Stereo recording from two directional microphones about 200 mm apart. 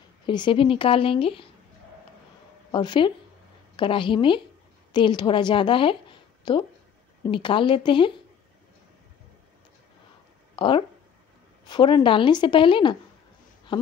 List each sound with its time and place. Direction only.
0.3 s a woman's voice: 25° left (ahead or behind)
2.7 s a woman's voice: 25° left (ahead or behind)
10.5 s a sound: 25° left (ahead or behind)
11.6 s a woman's voice: 25° left (ahead or behind)